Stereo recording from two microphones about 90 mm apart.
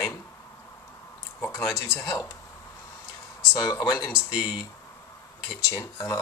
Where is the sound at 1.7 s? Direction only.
30° left (ahead or behind).